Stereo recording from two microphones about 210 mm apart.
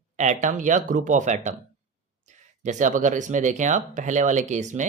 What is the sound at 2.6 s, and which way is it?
Speech, 35° right (ahead or behind).